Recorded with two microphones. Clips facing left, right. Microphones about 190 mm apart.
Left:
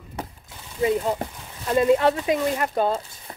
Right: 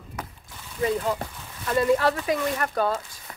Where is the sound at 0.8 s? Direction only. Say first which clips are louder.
Left 3 dB; 20° left (ahead or behind).